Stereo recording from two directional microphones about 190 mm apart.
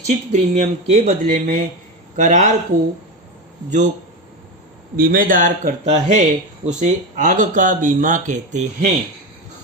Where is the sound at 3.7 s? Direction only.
40° right (ahead or behind).